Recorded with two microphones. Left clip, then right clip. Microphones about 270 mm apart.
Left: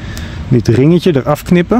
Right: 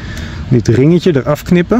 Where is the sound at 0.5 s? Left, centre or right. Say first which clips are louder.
Even; centre.